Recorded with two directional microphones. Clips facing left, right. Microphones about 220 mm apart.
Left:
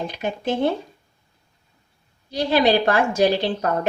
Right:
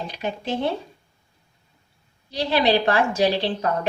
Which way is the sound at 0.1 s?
50° left (ahead or behind).